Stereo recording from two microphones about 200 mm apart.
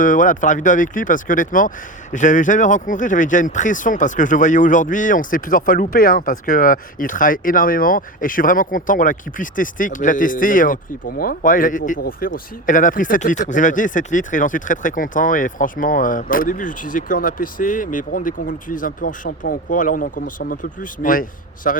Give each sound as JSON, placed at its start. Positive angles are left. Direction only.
{"t": 0.0, "sound": "speech", "side_deg": 40}